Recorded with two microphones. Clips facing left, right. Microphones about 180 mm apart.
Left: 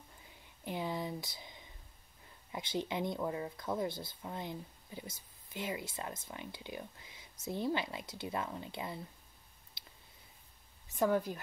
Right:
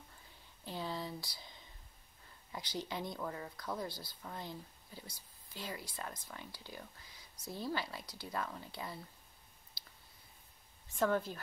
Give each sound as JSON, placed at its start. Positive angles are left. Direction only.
{"t": 0.7, "sound": "a sound", "side_deg": 15}
{"t": 2.5, "sound": "speech", "side_deg": 20}
{"t": 11.0, "sound": "a woman's voice", "side_deg": 15}